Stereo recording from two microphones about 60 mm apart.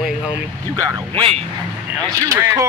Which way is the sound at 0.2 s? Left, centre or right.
Right.